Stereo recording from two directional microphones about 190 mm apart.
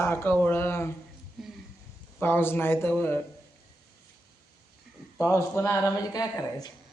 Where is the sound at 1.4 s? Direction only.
Centre (ahead or behind).